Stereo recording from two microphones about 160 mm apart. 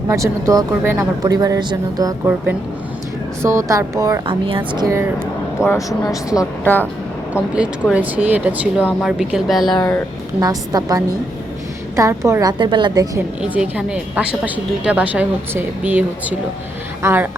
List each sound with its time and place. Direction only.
0.1 s speech: 20° right (ahead or behind)
3.4 s speech: 20° right (ahead or behind)
4.3 s speech: 35° right (ahead or behind)
4.9 s a woman's voice: 15° right (ahead or behind)
5.6 s a woman's voice: 20° left (ahead or behind)
7.3 s a woman's voice: 5° right (ahead or behind)
9.7 s speech: 25° left (ahead or behind)
10.4 s speech: 25° right (ahead or behind)
13.4 s a woman's voice: 5° right (ahead or behind)